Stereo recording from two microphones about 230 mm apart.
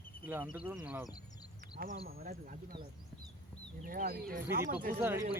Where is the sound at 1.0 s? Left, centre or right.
Centre.